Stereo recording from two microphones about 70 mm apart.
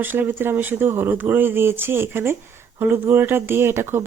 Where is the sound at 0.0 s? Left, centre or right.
Right.